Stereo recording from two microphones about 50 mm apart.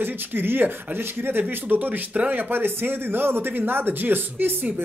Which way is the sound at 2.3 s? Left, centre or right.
Right.